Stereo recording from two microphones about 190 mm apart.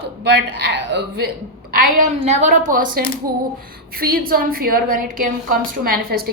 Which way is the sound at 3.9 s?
50° right (ahead or behind).